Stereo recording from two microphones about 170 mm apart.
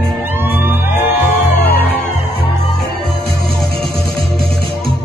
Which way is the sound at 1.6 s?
65° left (ahead or behind).